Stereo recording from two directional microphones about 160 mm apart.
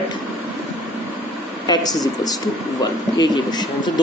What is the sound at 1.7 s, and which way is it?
Speech, 25° left (ahead or behind).